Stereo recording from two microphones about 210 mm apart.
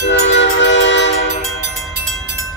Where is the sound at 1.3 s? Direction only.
55° right (ahead or behind).